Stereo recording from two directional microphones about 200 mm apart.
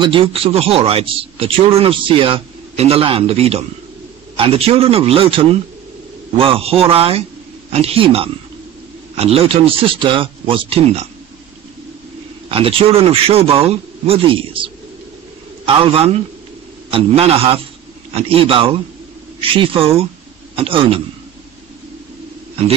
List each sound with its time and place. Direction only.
0.0 s speech: 25° right (ahead or behind)
12.4 s speech: 25° right (ahead or behind)